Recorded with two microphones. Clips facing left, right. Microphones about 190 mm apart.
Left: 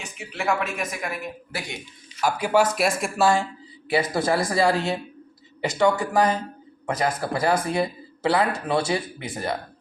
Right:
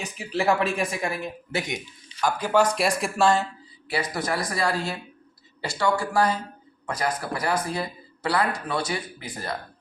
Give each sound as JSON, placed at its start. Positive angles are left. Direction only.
{"t": 0.0, "sound": "speech", "side_deg": -35}
{"t": 2.2, "sound": "speech", "side_deg": 10}
{"t": 3.8, "sound": "speech", "side_deg": 25}